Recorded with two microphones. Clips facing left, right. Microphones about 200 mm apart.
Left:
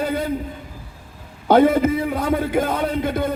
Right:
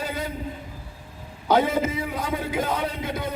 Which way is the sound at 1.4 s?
60° left (ahead or behind).